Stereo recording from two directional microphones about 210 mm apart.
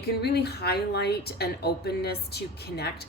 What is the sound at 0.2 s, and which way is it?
Speech, 50° left (ahead or behind).